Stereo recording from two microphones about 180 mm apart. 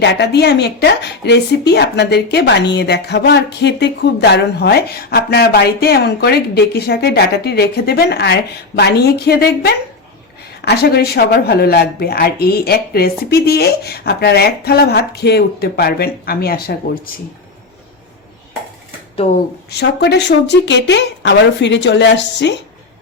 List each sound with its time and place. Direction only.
0.0 s speech: 70° left (ahead or behind)
19.1 s speech: 35° left (ahead or behind)
19.7 s a woman's voice: 70° left (ahead or behind)